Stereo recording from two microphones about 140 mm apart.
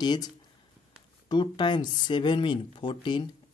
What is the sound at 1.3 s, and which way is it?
Speech, 35° left (ahead or behind).